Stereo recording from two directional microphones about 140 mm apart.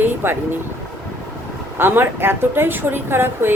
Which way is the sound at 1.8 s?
15° right (ahead or behind).